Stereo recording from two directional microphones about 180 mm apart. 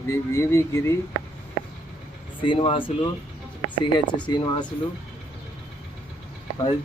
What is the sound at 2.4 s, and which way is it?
Speech, 30° left (ahead or behind).